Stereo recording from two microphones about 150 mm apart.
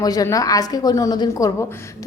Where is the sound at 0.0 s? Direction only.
25° left (ahead or behind).